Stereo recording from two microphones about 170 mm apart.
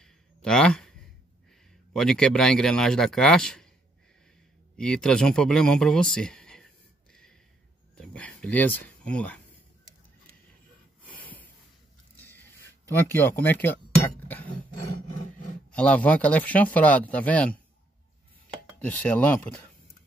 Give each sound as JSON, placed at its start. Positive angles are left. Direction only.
{"t": 0.0, "sound": "a sound", "side_deg": 5}
{"t": 2.0, "sound": "speech", "side_deg": 5}
{"t": 4.7, "sound": "speech", "side_deg": 5}
{"t": 12.9, "sound": "speech", "side_deg": 10}
{"t": 15.7, "sound": "speech", "side_deg": 5}
{"t": 18.8, "sound": "speech", "side_deg": 10}